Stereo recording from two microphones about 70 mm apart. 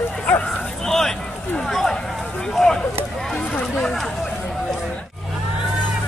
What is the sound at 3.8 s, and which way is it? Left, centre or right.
Chatter, centre.